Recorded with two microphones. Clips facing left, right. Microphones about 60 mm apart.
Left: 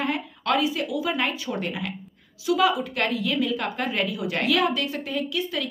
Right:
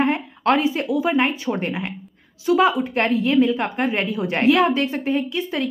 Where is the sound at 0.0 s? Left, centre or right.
Right.